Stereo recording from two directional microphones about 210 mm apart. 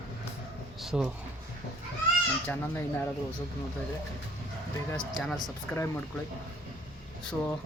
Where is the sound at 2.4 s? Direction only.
10° left (ahead or behind).